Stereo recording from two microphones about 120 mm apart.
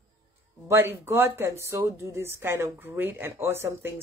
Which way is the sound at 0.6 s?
20° right (ahead or behind).